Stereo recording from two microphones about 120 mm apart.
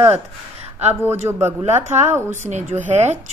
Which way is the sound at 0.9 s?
20° right (ahead or behind).